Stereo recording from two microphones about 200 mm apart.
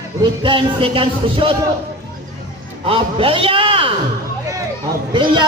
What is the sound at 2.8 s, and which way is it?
A man's voice, 30° right (ahead or behind).